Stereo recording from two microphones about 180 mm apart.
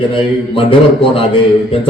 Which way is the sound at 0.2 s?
30° left (ahead or behind).